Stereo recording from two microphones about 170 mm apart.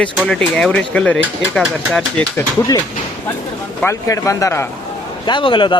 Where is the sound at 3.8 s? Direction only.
20° left (ahead or behind).